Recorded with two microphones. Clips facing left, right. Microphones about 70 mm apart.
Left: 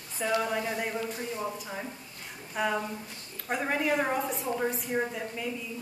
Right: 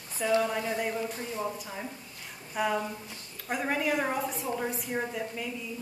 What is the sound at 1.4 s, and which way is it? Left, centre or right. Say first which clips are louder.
A woman's voice: even; centre.